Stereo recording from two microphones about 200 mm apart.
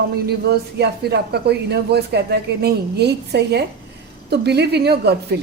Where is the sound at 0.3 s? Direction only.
55° right (ahead or behind).